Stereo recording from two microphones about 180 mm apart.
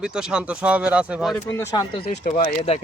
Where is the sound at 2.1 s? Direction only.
45° left (ahead or behind).